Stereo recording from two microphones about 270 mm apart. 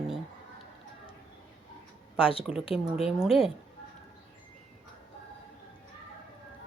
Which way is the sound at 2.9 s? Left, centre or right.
Centre.